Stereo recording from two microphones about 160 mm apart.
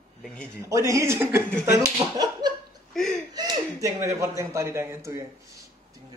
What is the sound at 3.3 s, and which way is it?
Speech, 25° right (ahead or behind).